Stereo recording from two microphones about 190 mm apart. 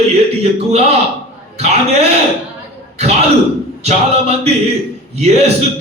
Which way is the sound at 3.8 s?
35° right (ahead or behind).